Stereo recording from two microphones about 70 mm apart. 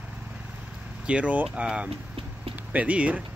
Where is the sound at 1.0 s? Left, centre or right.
Centre.